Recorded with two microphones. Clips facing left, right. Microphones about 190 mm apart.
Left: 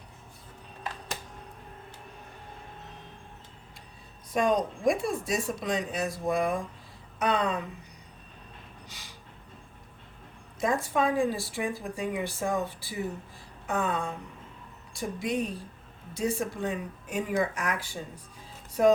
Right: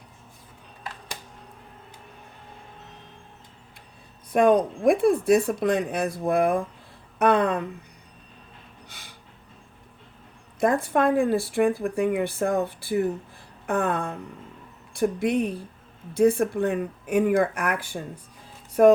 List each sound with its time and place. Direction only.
4.3 s speech: 55° right (ahead or behind)
8.9 s a sound: 55° right (ahead or behind)
10.6 s speech: 60° right (ahead or behind)